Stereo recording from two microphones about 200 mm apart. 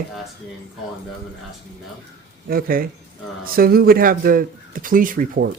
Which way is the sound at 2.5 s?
45° right (ahead or behind).